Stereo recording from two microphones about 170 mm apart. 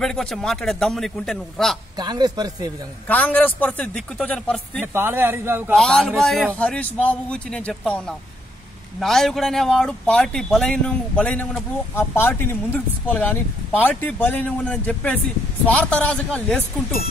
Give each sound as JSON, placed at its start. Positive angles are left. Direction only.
{"t": 0.0, "sound": "speech", "side_deg": 5}
{"t": 2.0, "sound": "speech", "side_deg": -25}
{"t": 3.1, "sound": "speech", "side_deg": 10}
{"t": 4.9, "sound": "speech", "side_deg": -15}
{"t": 5.8, "sound": "speech", "side_deg": 5}
{"t": 9.0, "sound": "speech", "side_deg": 0}